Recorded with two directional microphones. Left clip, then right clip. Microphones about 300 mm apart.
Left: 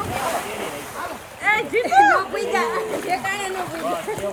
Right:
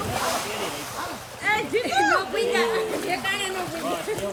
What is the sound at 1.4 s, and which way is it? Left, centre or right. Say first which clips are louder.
Speech: left 4 dB; centre.